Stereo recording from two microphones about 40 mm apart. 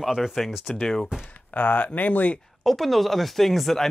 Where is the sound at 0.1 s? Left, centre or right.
Centre.